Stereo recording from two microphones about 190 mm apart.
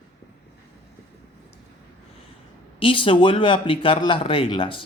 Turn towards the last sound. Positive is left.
turn(degrees=25)  # may be behind; listen again after turning